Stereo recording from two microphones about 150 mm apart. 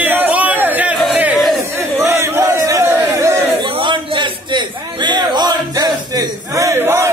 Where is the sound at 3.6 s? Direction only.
35° right (ahead or behind).